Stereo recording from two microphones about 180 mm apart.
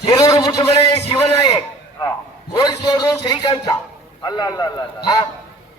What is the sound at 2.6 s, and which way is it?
A man's voice, 25° left (ahead or behind).